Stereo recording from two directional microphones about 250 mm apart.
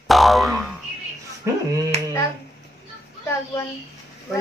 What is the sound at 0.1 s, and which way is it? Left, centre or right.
Boing, centre.